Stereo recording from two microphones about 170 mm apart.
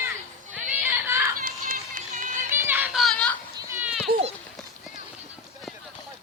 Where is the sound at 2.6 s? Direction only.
10° right (ahead or behind).